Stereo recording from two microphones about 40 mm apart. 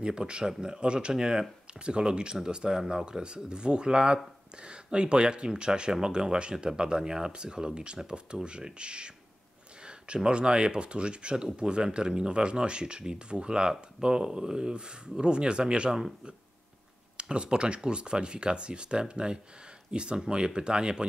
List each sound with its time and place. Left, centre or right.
0.0 s speech: right
17.2 s speech: right